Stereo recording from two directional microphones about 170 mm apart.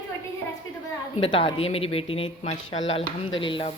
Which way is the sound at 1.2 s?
35° left (ahead or behind).